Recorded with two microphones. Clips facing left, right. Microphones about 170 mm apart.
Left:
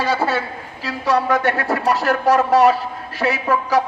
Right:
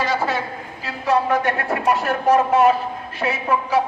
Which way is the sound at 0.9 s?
80° left.